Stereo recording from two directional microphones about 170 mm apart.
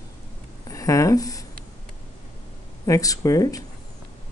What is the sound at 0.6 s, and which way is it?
Speech, 20° left (ahead or behind).